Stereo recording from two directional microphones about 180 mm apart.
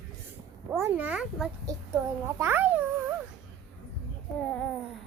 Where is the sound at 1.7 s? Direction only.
20° right (ahead or behind).